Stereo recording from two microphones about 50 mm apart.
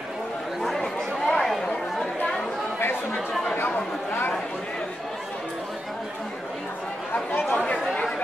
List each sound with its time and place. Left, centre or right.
0.6 s chatter: centre
3.6 s chatter: left
7.5 s chatter: centre